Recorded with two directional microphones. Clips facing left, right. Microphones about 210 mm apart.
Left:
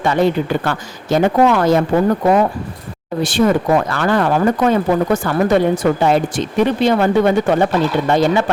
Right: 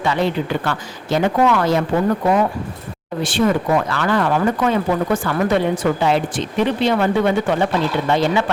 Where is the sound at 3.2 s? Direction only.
40° left (ahead or behind).